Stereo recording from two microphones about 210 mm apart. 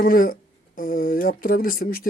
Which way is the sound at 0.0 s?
45° left (ahead or behind).